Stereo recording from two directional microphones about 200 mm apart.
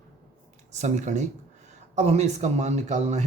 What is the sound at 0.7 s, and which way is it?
Speech, 35° right (ahead or behind).